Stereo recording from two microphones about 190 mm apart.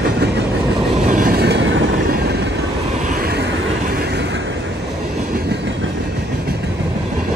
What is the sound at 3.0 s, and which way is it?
Vehicle, 50° right (ahead or behind).